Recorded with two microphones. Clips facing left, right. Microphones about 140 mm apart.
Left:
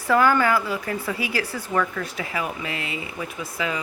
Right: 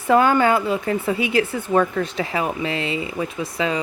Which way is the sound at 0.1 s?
20° right (ahead or behind).